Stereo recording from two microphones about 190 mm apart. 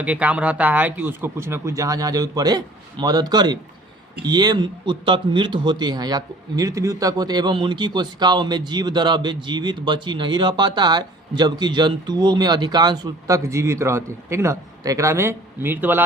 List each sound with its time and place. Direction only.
0.0 s speech: 5° right (ahead or behind)